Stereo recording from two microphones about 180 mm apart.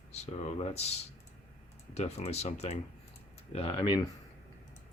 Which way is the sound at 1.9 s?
35° left (ahead or behind).